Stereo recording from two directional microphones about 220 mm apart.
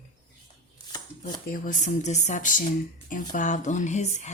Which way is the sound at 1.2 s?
35° left (ahead or behind).